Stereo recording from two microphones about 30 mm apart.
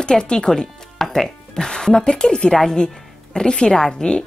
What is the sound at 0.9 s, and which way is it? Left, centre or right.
Music, centre.